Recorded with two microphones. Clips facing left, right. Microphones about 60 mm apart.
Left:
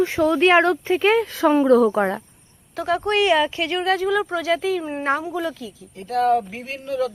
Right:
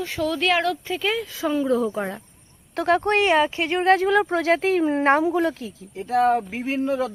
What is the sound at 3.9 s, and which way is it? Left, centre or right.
Speech, right.